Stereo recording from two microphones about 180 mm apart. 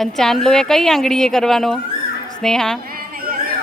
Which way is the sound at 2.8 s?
55° right (ahead or behind).